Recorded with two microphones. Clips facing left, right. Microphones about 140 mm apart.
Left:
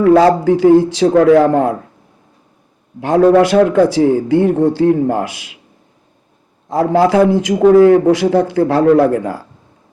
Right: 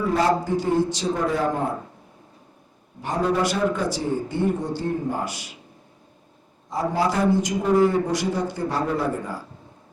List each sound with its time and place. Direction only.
0.0 s a man's voice: 90° left
3.0 s a man's voice: 75° left (ahead or behind); by 5.5 s 90° left
6.7 s a man's voice: 90° left